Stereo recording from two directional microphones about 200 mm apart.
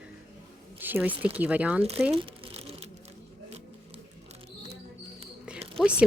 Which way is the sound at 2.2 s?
30° right (ahead or behind).